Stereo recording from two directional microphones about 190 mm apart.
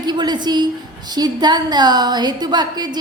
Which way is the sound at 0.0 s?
20° right (ahead or behind).